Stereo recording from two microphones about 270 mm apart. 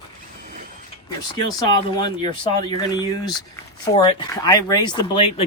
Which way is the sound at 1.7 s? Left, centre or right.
Centre.